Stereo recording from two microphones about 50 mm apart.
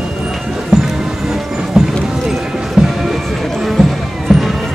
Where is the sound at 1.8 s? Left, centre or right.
Centre.